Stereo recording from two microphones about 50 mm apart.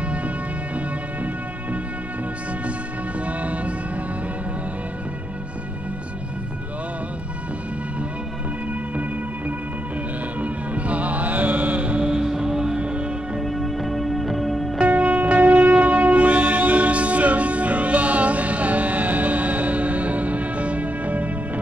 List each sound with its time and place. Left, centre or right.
0.7 s music: right
3.2 s music: right
10.4 s music: right
13.4 s music: centre
14.8 s music: right